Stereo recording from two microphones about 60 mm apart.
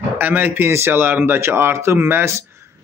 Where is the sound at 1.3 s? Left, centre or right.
Right.